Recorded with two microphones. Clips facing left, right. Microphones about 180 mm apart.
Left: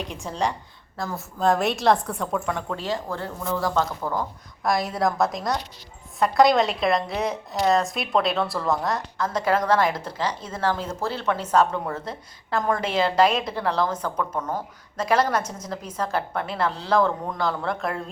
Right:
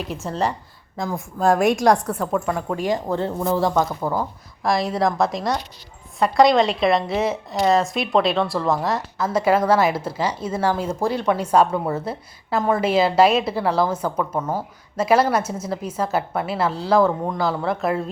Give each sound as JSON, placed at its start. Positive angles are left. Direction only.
{"t": 0.0, "sound": "a woman's voice", "side_deg": 0}
{"t": 0.9, "sound": "a woman's voice", "side_deg": -15}
{"t": 2.6, "sound": "speech", "side_deg": -15}
{"t": 3.3, "sound": "speech", "side_deg": -35}
{"t": 3.8, "sound": "a woman's voice", "side_deg": -10}
{"t": 4.6, "sound": "a woman's voice", "side_deg": 0}